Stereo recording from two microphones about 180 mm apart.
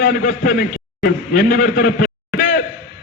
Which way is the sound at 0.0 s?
55° left (ahead or behind).